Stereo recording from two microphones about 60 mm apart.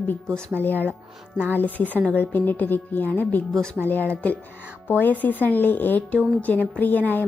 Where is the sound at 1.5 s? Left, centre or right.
Left.